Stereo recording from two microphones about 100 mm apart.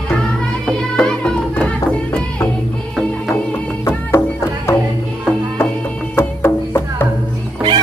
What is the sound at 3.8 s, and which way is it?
Music, 25° left (ahead or behind).